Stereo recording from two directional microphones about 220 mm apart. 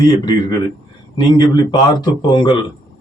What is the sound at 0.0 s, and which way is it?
A man's voice, 20° left (ahead or behind).